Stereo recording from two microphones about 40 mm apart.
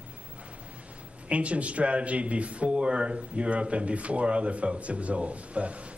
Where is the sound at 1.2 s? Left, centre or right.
Right.